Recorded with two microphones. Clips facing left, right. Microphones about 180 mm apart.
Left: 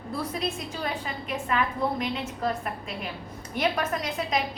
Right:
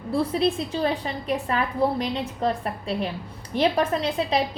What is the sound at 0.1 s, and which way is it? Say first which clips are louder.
A woman's voice: right 8 dB; 30° right (ahead or behind).